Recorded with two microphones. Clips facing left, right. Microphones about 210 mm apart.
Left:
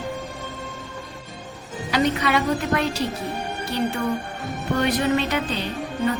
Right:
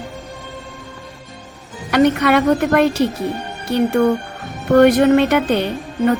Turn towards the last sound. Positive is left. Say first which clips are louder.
# right 6 dB
turn(degrees=-60)  # may be behind; listen again after turning